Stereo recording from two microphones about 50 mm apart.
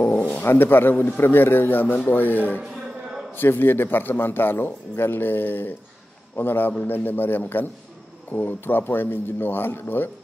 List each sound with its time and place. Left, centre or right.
0.1 s dog: left
0.4 s a man's voice: left